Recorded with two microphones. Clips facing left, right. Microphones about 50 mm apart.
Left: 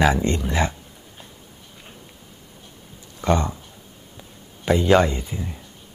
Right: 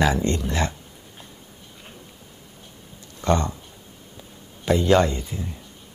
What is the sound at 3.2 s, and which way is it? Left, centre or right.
Speech, centre.